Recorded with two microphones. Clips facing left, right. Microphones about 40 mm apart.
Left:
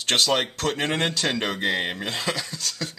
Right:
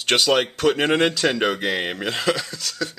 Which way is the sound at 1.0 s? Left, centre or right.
Centre.